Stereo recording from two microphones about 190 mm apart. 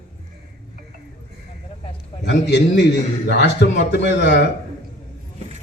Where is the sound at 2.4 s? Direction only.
65° left (ahead or behind).